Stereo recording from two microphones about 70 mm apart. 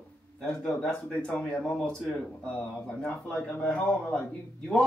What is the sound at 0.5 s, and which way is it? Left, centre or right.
A man's voice, centre.